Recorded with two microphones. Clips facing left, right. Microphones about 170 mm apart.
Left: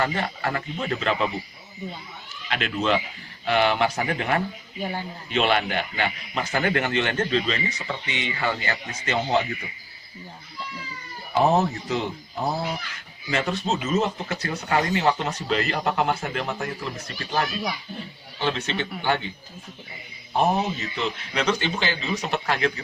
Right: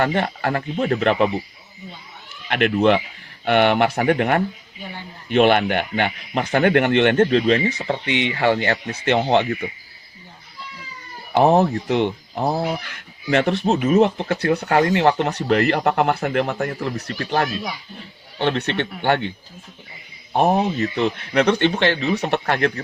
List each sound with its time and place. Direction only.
0.0 s speech: 60° right (ahead or behind)
2.5 s speech: 55° right (ahead or behind)
4.8 s a man's voice: 40° left (ahead or behind)
5.3 s speech: 55° right (ahead or behind)
11.3 s speech: 60° right (ahead or behind)
20.7 s speech: 60° right (ahead or behind)